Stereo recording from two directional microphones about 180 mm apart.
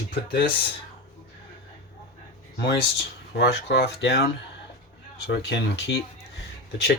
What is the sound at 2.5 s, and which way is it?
Speech, 70° left (ahead or behind).